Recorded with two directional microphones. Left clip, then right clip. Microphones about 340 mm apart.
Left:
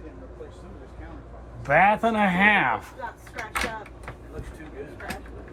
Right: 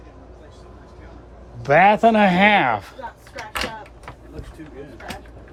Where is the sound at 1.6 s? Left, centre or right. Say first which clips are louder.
Right 6 dB; centre.